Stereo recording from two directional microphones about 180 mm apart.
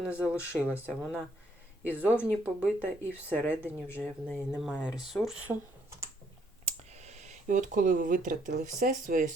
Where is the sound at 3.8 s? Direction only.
10° left (ahead or behind).